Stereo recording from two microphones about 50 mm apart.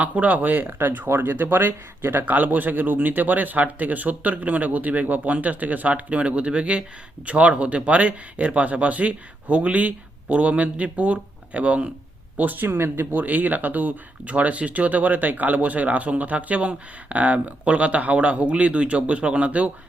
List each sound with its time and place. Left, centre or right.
0.0 s speech: right
12.4 s speech: right
12.6 s speech: right
13.1 s speech: right